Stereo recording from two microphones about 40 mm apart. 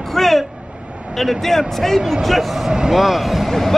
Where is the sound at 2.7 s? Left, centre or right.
Centre.